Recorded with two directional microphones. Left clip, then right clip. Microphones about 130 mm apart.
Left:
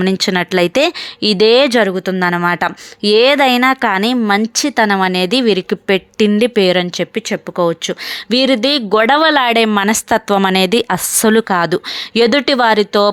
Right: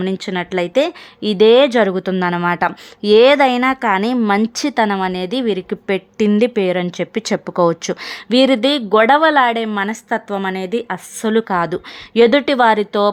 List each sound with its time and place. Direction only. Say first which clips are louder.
0.0 s speech: left 6 dB; 30° left (ahead or behind)
1.8 s speech: left 2 dB; centre (ahead or behind)
4.9 s speech: left 6 dB; 20° left (ahead or behind)
7.3 s speech: right 2 dB; 10° right (ahead or behind)
8.3 s speech: even; 5° left (ahead or behind)
8.9 s speech: even; 20° left (ahead or behind)
11.4 s speech: left 4 dB; 15° left (ahead or behind)